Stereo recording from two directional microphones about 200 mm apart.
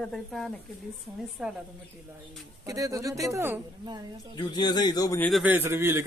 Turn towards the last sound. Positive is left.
turn(degrees=-10)  # may be behind; listen again after turning